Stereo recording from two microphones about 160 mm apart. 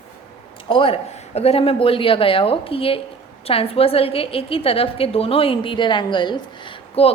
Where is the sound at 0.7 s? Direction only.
35° left (ahead or behind).